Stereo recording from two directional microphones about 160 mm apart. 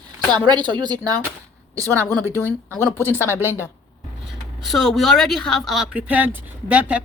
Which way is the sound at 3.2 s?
15° right (ahead or behind).